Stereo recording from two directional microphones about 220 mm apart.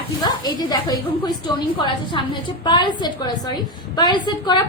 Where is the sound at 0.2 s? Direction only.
20° left (ahead or behind).